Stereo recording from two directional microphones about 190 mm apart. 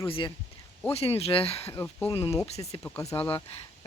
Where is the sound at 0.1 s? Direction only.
25° left (ahead or behind).